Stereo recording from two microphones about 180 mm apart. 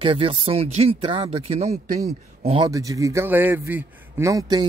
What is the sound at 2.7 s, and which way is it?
Speech, 20° right (ahead or behind).